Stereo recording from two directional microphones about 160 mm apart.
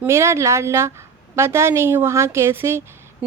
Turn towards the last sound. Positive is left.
turn(degrees=-15)  # may be behind; listen again after turning